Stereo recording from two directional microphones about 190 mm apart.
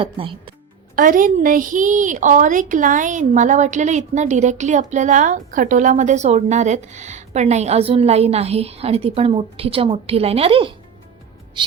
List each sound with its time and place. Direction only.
0.0 s speech: 25° right (ahead or behind)
0.9 s a woman's voice: 45° right (ahead or behind); by 10.8 s 30° right (ahead or behind)